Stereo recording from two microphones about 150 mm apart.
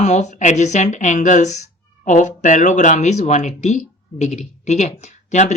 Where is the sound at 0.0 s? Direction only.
50° left (ahead or behind).